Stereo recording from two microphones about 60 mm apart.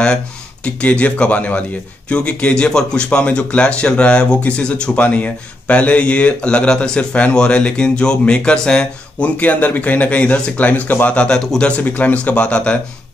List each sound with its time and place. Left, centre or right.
0.7 s speech: left
11.1 s speech: centre
11.8 s speech: left